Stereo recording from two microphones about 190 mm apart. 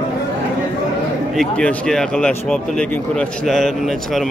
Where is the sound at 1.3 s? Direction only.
5° left (ahead or behind).